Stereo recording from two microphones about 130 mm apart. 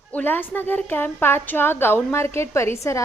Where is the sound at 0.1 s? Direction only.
15° left (ahead or behind).